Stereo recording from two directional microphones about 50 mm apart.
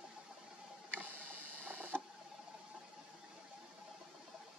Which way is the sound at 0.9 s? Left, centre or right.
Right.